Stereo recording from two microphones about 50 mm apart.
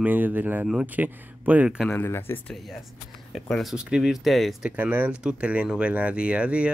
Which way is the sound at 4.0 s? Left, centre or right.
Centre.